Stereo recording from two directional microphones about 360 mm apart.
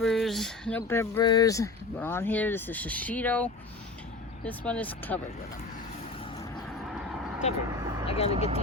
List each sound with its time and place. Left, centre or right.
0.0 s speech: centre
7.1 s vehicle: centre
8.0 s speech: centre